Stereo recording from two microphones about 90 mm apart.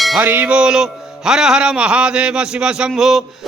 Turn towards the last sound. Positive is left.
turn(degrees=-5)  # may be behind; listen again after turning